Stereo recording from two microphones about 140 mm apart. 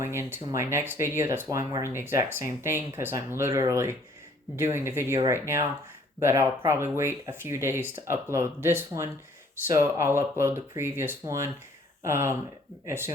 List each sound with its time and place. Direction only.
0.0 s speech: 20° right (ahead or behind)